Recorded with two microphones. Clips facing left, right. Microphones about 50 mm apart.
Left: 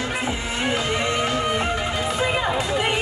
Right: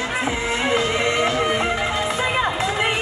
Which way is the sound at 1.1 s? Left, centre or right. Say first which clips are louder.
Right 3 dB; centre.